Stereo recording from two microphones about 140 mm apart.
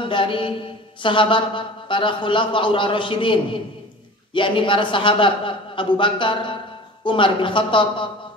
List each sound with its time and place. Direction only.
0.0 s a man's voice: 40° left (ahead or behind)